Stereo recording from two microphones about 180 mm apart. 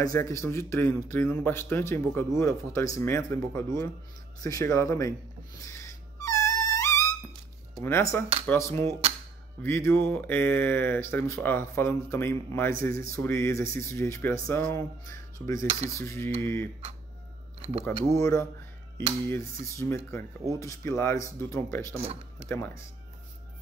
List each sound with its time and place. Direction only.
0.0 s a man's voice: 15° left (ahead or behind)
5.6 s music: 15° left (ahead or behind)
7.8 s a man's voice: 15° left (ahead or behind)
17.6 s a sound: 35° right (ahead or behind)
18.1 s a man's voice: 15° left (ahead or behind)
19.7 s a man's voice: 15° left (ahead or behind)
21.9 s speech: 35° right (ahead or behind)
22.5 s a man's voice: 15° left (ahead or behind)